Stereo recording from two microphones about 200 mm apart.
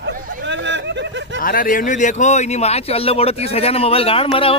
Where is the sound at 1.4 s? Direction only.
45° left (ahead or behind).